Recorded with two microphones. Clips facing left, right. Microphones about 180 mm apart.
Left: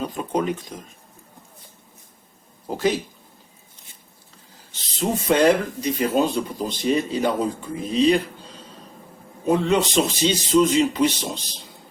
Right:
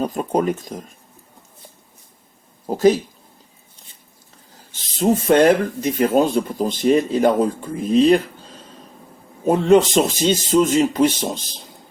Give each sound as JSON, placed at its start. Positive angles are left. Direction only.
{"t": 0.0, "sound": "speech", "side_deg": -45}
{"t": 2.6, "sound": "speech", "side_deg": -40}
{"t": 4.7, "sound": "speech", "side_deg": -50}
{"t": 9.5, "sound": "speech", "side_deg": -45}